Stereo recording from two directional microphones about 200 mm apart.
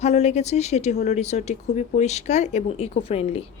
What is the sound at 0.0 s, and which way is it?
Speech, 35° left (ahead or behind).